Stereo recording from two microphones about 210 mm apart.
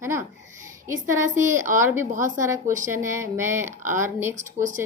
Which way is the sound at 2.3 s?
15° right (ahead or behind).